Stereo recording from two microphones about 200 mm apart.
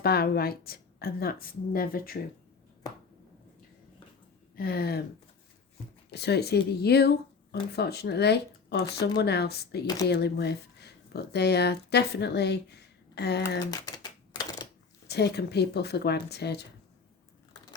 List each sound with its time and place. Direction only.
0.0 s a woman's voice: 50° left (ahead or behind)
4.5 s a woman's voice: 50° left (ahead or behind)
6.1 s speech: 55° left (ahead or behind)
13.7 s typewriter: 20° left (ahead or behind)
15.0 s speech: 55° left (ahead or behind)